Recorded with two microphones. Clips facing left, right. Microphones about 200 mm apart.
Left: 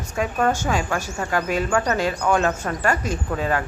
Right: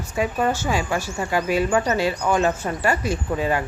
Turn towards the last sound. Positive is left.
turn(degrees=-10)  # may be behind; listen again after turning